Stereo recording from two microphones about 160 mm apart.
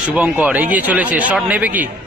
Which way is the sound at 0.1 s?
10° right (ahead or behind).